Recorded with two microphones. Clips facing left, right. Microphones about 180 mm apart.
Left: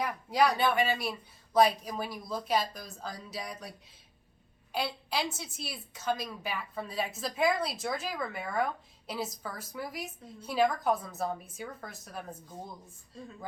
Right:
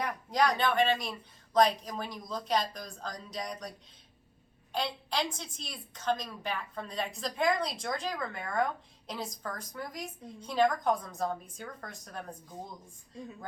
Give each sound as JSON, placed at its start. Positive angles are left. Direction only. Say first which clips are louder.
{"t": 0.0, "sound": "a woman's voice", "louder": "left 2 dB", "side_deg": 5}